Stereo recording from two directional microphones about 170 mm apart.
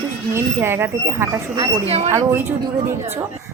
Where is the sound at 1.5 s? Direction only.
30° right (ahead or behind).